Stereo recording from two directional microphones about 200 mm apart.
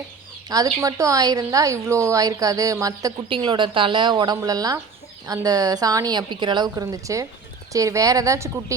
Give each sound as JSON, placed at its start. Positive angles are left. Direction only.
{"t": 0.4, "sound": "speech", "side_deg": -20}